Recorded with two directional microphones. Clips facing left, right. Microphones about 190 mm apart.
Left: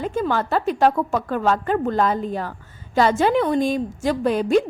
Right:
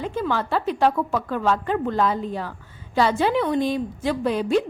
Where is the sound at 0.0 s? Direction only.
45° left (ahead or behind).